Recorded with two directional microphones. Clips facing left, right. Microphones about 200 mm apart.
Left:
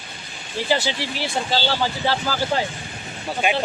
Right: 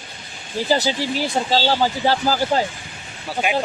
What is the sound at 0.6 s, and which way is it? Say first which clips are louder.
Speech: right 3 dB; 40° right (ahead or behind).